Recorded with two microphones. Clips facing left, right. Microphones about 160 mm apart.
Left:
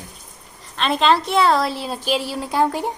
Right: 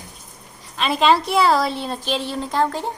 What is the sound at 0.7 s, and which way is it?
A woman's voice, 5° right (ahead or behind).